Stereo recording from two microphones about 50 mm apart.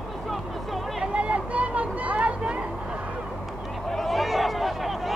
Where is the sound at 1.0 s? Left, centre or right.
Right.